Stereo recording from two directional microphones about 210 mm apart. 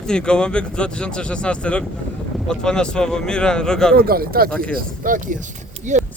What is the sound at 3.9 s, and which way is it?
Speech, 45° right (ahead or behind).